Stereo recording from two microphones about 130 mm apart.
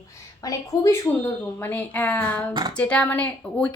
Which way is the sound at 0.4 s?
25° left (ahead or behind).